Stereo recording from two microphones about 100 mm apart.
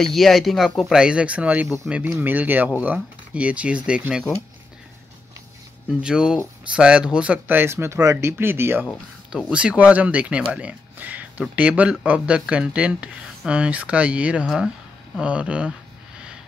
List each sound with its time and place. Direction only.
0.0 s speech: centre (ahead or behind); by 1.7 s 15° right (ahead or behind)
2.0 s speech: 30° right (ahead or behind); by 4.2 s 10° right (ahead or behind)
6.0 s speech: 10° right (ahead or behind); by 8.8 s 25° right (ahead or behind)
9.5 s speech: 10° right (ahead or behind)